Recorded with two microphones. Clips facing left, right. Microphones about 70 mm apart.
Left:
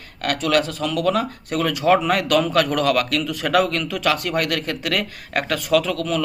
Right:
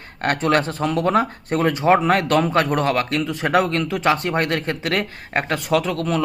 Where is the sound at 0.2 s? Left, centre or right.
Right.